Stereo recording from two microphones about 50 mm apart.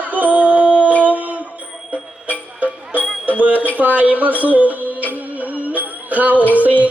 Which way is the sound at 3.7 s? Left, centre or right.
Right.